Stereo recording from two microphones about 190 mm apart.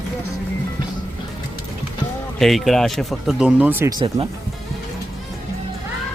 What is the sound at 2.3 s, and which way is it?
Speech, centre (ahead or behind).